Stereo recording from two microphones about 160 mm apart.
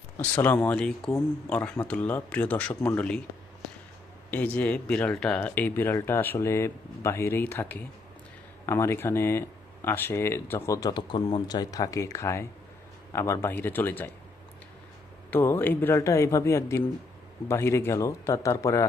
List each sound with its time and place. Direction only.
0.3 s speech: 10° left (ahead or behind)
4.3 s speech: 10° left (ahead or behind)
15.3 s speech: 15° left (ahead or behind)